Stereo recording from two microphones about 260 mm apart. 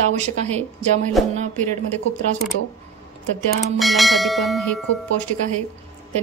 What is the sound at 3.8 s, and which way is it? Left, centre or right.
Speech, centre.